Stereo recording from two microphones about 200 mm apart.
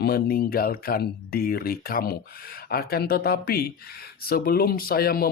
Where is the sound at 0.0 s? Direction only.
50° left (ahead or behind).